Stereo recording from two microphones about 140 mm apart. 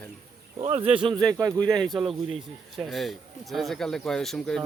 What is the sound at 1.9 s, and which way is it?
Speech, 40° right (ahead or behind).